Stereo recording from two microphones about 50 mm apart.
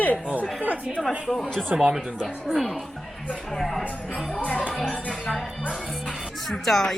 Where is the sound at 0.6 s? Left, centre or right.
Right.